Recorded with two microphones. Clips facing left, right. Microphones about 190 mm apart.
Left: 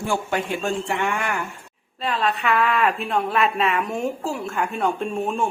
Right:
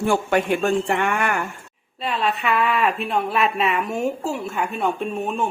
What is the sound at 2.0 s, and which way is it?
A woman's voice, 10° right (ahead or behind).